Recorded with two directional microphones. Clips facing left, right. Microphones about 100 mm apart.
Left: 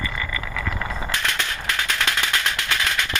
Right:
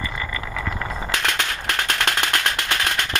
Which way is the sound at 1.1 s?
65° right (ahead or behind).